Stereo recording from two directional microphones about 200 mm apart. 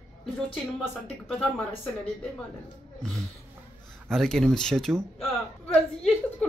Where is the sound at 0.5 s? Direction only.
5° left (ahead or behind).